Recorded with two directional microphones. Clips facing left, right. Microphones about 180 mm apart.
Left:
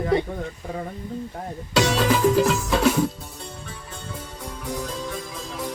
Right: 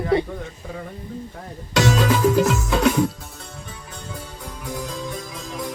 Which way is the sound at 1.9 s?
5° right (ahead or behind).